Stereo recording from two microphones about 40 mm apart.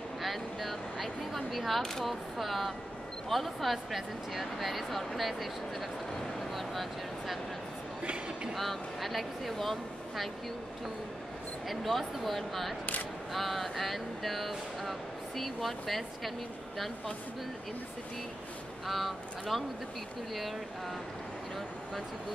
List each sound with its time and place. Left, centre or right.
0.2 s speech: centre
6.5 s a sound: centre
8.0 s a sound: right
8.5 s speech: centre
11.7 s speech: centre
18.9 s speech: centre